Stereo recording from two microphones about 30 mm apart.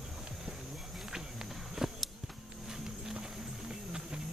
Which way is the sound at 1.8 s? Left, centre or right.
Centre.